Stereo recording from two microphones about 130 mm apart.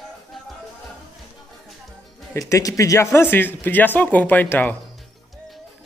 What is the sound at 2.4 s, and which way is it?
Speech, 25° left (ahead or behind).